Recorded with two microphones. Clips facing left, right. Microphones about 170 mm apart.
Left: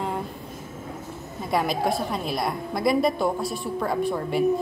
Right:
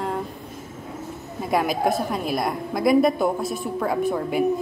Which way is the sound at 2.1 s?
Centre (ahead or behind).